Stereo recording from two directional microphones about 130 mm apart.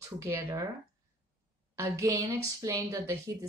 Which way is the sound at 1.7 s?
25° right (ahead or behind).